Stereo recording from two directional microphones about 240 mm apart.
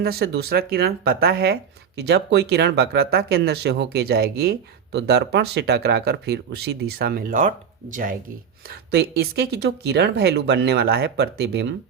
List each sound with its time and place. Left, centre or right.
0.0 s speech: right